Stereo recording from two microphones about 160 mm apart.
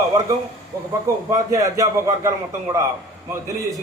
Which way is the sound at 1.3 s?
20° right (ahead or behind).